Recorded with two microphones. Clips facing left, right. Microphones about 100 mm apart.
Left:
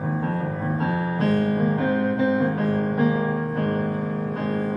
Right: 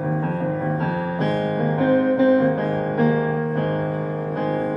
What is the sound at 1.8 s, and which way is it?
Music, 5° left (ahead or behind).